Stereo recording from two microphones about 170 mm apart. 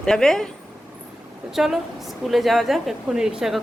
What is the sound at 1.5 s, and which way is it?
A woman's voice, centre (ahead or behind).